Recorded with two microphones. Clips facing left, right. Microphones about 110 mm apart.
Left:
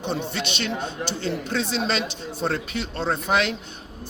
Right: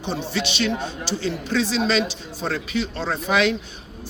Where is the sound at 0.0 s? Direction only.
60° left (ahead or behind).